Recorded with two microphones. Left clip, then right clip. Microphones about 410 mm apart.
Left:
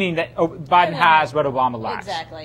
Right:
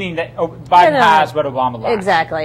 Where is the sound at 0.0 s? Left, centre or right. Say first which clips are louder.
Right 1 dB; left.